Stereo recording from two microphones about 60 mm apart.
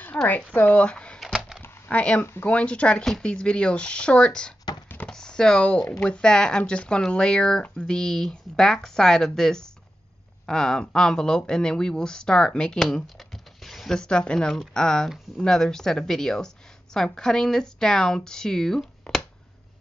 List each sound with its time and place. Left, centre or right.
0.0 s speech: left
1.6 s a sound: left
2.4 s speech: left
4.8 s chopping: left
5.1 s speech: centre
13.0 s a sound: centre
14.7 s speech: centre